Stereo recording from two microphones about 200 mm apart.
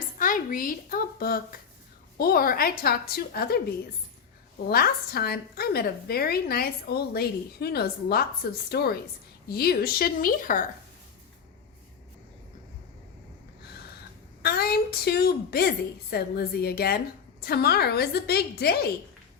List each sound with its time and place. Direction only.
0.2 s a child's voice: 45° left (ahead or behind)
4.6 s a woman's voice: 50° left (ahead or behind)
14.4 s a woman's voice: 50° left (ahead or behind)